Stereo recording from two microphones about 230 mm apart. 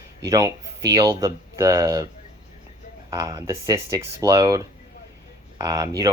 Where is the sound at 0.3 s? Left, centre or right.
Centre.